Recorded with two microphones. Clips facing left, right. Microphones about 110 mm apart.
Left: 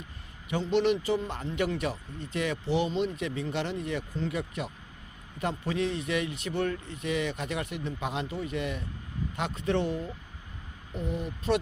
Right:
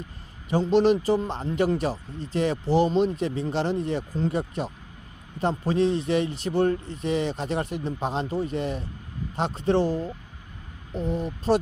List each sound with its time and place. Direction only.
0.5 s speech: 35° right (ahead or behind)